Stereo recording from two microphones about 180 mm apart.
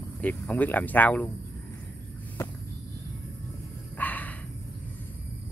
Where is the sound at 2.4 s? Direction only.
15° left (ahead or behind).